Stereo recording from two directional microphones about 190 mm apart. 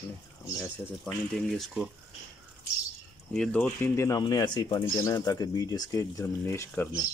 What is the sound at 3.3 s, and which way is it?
Speech, 5° left (ahead or behind).